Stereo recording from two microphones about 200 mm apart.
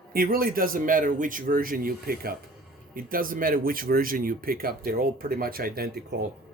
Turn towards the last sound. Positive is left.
turn(degrees=-50)  # may be behind; listen again after turning